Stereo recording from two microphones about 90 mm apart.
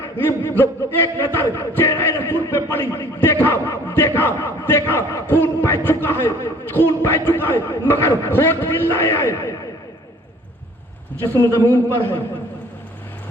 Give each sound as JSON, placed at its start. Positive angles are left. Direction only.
{"t": 0.0, "sound": "a man's voice", "side_deg": 25}
{"t": 11.5, "sound": "a man's voice", "side_deg": 25}